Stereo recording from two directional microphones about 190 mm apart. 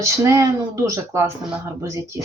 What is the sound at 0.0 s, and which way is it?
Speech, 15° right (ahead or behind).